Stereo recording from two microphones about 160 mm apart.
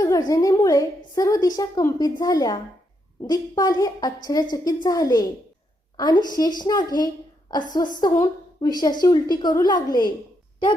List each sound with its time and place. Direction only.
0.0 s a woman's voice: 20° left (ahead or behind)